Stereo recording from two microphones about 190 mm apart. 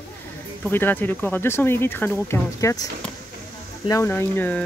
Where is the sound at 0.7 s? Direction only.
10° left (ahead or behind).